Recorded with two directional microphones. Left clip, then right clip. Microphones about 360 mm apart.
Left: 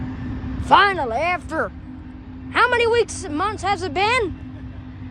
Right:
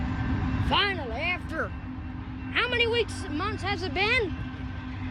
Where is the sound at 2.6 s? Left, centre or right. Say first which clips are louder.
Left 7 dB; centre.